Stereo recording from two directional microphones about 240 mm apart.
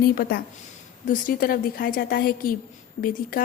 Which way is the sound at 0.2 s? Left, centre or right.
Left.